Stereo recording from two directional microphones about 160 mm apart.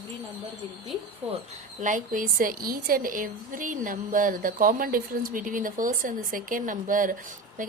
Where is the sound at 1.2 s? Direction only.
40° right (ahead or behind).